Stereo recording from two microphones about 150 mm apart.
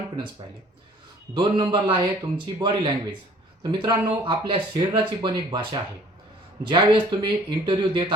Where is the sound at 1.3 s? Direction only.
30° right (ahead or behind).